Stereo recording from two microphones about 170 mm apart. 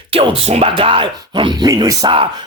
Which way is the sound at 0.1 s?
35° right (ahead or behind).